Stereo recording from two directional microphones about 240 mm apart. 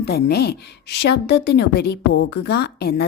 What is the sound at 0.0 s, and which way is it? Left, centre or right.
A woman's voice, left.